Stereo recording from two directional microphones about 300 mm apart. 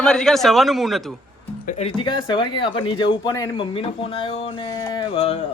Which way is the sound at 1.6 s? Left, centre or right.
Centre.